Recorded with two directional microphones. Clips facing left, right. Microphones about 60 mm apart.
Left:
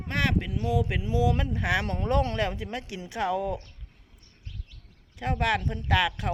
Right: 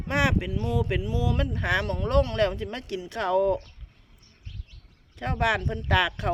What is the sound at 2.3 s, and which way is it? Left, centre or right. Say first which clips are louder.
Speech: right 4 dB; centre.